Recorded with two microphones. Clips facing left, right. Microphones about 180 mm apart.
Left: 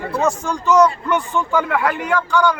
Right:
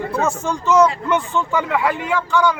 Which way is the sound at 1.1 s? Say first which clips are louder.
Even; 25° right (ahead or behind).